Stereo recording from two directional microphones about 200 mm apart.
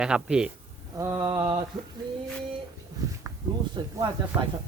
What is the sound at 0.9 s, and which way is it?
Mantra, 15° right (ahead or behind).